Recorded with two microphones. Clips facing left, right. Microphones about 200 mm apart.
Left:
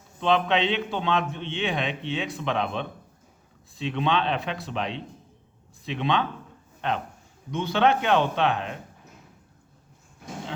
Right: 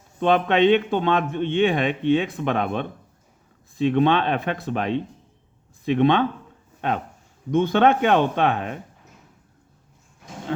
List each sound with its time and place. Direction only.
0.2 s speech: 55° right (ahead or behind)
7.5 s speech: 50° right (ahead or behind)